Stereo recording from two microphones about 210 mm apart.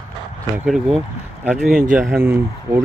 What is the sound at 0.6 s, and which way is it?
A man's voice, centre (ahead or behind).